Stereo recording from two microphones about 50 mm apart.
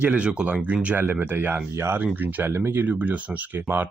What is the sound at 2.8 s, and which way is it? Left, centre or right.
Speech, right.